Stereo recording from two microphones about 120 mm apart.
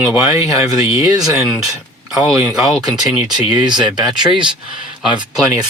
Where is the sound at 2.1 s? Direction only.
5° right (ahead or behind).